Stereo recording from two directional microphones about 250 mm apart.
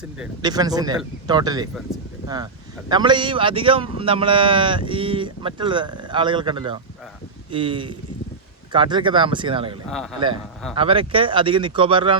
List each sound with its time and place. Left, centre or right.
0.4 s speech: centre
9.9 s a man's voice: centre
10.8 s speech: right